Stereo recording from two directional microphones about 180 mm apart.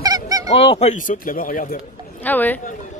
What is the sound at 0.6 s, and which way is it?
Speech, 35° left (ahead or behind).